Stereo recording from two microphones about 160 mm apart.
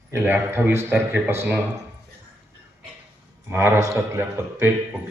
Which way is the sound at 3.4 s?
15° right (ahead or behind).